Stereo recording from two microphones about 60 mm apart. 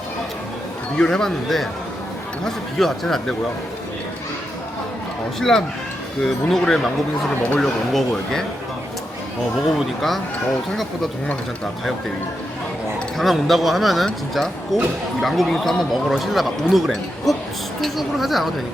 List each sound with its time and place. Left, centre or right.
0.9 s speech: centre
5.4 s speech: centre
7.4 s speech: centre
9.7 s speech: centre
13.1 s speech: centre